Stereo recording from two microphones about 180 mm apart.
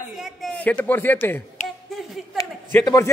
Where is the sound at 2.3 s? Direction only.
20° left (ahead or behind).